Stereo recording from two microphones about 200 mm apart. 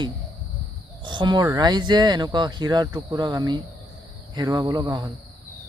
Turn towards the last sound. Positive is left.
turn(degrees=-20)  # may be behind; listen again after turning